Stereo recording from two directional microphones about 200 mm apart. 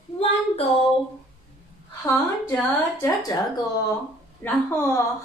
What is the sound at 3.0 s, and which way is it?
Speech, 20° left (ahead or behind).